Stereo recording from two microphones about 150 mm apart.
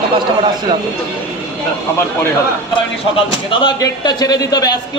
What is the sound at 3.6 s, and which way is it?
A man's voice, 30° left (ahead or behind).